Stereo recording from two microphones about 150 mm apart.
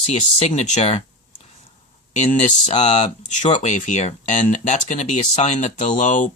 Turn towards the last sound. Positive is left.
turn(degrees=55)  # may be behind; listen again after turning